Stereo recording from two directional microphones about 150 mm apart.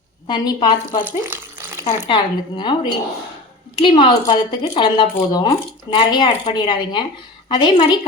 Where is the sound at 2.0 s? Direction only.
30° left (ahead or behind).